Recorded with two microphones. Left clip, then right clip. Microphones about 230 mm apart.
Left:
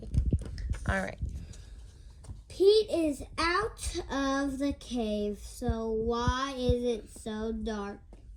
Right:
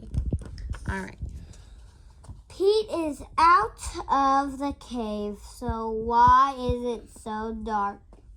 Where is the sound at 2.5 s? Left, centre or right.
Right.